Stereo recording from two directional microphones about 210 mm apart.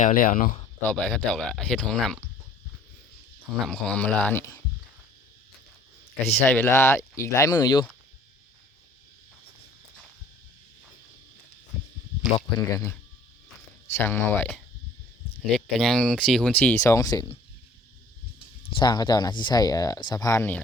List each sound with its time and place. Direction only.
0.0 s speech: 40° left (ahead or behind)
0.8 s speech: 5° left (ahead or behind)
3.6 s speech: 5° left (ahead or behind)
6.3 s speech: 10° left (ahead or behind)
12.5 s speech: 15° left (ahead or behind)
18.3 s speech: 25° left (ahead or behind)